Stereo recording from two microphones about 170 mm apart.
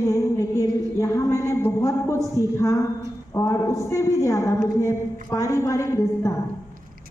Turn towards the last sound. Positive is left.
turn(degrees=20)  # may be behind; listen again after turning